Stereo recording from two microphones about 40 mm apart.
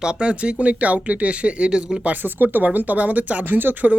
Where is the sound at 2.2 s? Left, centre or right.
Right.